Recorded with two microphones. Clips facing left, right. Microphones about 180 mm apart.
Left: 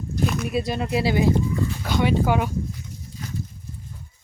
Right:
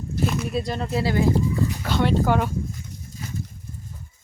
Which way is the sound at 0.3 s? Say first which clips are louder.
Left 1 dB; centre (ahead or behind).